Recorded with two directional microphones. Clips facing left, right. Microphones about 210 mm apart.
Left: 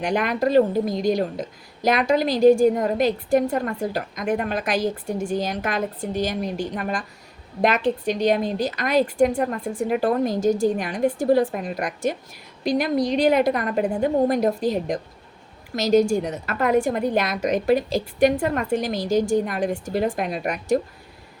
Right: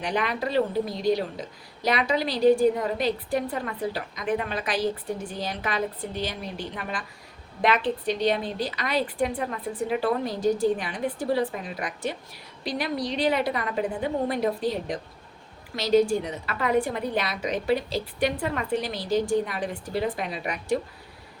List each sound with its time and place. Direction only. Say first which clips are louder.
0.0 s a woman's voice: left 6 dB; 45° left (ahead or behind)